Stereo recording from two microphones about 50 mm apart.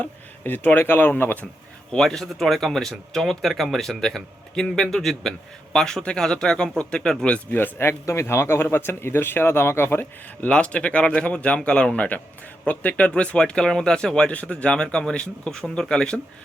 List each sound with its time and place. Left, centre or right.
0.0 s speech: left
1.9 s speech: centre
7.5 s speech: left
7.9 s speech: left
10.4 s speech: left